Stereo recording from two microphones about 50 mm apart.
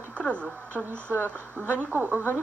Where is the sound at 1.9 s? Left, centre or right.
Right.